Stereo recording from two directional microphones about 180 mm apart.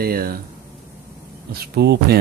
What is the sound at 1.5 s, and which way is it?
Speech, 60° right (ahead or behind).